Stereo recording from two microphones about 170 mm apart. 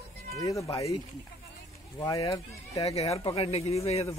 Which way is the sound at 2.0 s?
25° left (ahead or behind).